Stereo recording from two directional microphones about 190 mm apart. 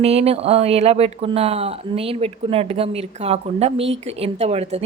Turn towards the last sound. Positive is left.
turn(degrees=-35)  # may be behind; listen again after turning